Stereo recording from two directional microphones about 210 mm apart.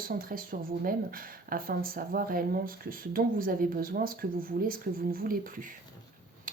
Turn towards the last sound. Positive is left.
turn(degrees=-45)  # may be behind; listen again after turning